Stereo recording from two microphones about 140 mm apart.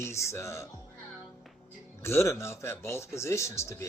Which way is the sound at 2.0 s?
20° left (ahead or behind).